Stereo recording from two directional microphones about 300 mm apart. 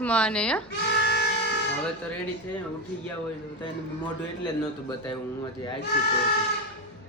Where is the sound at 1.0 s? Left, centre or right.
Left.